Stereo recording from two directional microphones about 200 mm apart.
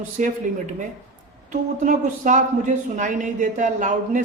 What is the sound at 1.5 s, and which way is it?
A man's voice, 40° right (ahead or behind).